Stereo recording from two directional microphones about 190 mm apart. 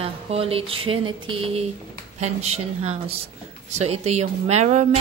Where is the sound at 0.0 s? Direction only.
30° right (ahead or behind).